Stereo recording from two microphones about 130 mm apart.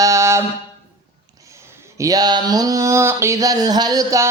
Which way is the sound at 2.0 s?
30° right (ahead or behind).